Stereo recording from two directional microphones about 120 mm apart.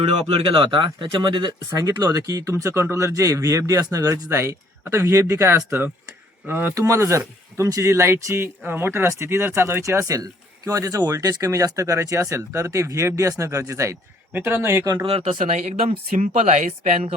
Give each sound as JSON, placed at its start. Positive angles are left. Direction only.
{"t": 0.3, "sound": "speech", "side_deg": -45}
{"t": 1.7, "sound": "speech", "side_deg": -30}
{"t": 15.0, "sound": "speech", "side_deg": -55}
{"t": 15.4, "sound": "speech", "side_deg": -85}